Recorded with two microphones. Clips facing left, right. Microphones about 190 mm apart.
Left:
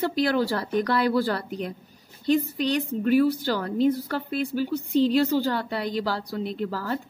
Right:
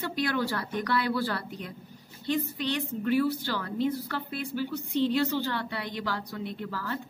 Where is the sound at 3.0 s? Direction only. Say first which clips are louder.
Left 5 dB; 40° left (ahead or behind).